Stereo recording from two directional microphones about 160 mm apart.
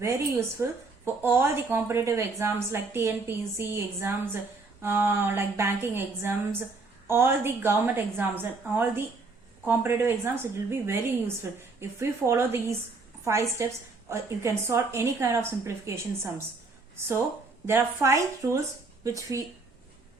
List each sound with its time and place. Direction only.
0.0 s speech: 15° right (ahead or behind)